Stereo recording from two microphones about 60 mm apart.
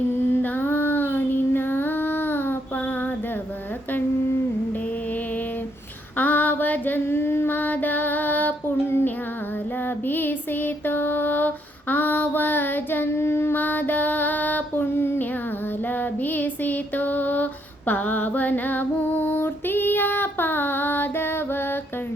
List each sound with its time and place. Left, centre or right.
0.1 s child singing: left
6.1 s female singing: left
13.6 s music: left
15.9 s female singing: left